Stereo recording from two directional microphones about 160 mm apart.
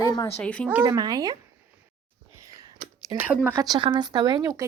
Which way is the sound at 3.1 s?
10° right (ahead or behind).